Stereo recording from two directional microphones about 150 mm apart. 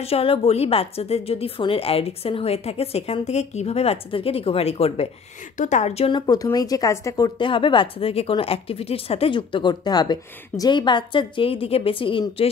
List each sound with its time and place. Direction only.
0.0 s speech: 40° left (ahead or behind)
5.6 s a woman's voice: 55° left (ahead or behind)
6.0 s speech: 30° left (ahead or behind)